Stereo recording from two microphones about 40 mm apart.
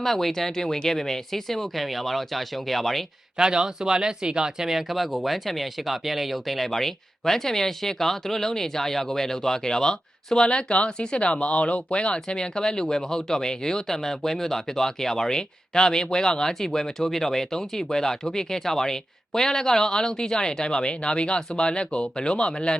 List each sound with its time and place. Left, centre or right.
0.0 s speech: centre
3.3 s speech: centre
4.9 s speech: centre; by 22.7 s left